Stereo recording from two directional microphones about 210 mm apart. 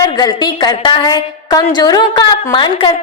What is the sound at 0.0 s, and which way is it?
A woman's voice, 20° left (ahead or behind).